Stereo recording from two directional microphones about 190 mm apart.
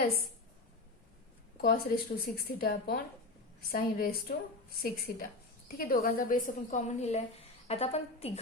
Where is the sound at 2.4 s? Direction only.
55° left (ahead or behind).